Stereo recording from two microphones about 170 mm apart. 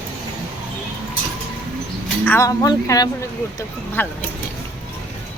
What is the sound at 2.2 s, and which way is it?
Speech, 15° left (ahead or behind).